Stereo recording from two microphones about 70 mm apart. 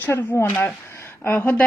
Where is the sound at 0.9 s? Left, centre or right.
Left.